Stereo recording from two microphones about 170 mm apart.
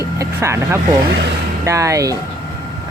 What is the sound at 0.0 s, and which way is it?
Speech, 15° right (ahead or behind).